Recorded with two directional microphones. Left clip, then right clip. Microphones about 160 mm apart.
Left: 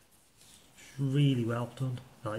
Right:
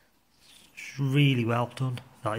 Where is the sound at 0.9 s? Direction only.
30° right (ahead or behind).